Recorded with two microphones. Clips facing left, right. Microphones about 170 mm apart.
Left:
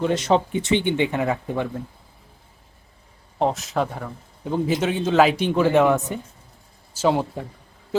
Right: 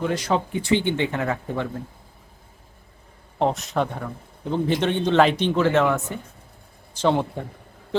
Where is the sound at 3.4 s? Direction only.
Centre (ahead or behind).